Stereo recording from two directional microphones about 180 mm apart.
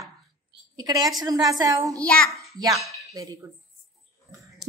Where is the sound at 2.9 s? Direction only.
20° right (ahead or behind).